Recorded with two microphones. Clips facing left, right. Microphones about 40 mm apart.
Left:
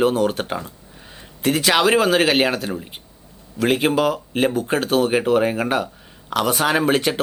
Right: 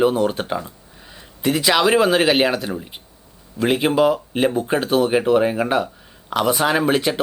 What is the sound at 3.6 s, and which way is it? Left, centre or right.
Speech, centre.